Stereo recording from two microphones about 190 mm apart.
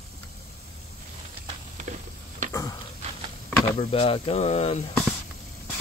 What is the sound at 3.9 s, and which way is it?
Speech, 30° left (ahead or behind).